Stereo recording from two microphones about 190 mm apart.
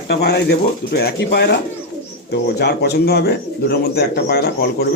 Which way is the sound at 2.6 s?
60° left (ahead or behind).